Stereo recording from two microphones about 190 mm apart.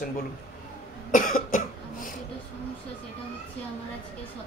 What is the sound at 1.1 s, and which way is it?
Cough, 45° left (ahead or behind).